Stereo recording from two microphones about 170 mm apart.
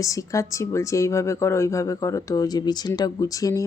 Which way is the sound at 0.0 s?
20° left (ahead or behind).